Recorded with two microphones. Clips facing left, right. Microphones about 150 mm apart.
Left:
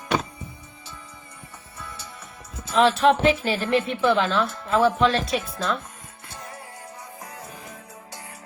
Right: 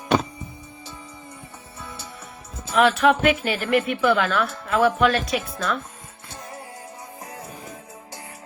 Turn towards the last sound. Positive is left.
turn(degrees=-25)  # may be behind; listen again after turning